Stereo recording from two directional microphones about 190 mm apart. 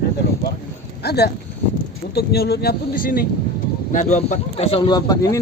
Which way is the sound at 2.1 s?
55° left (ahead or behind).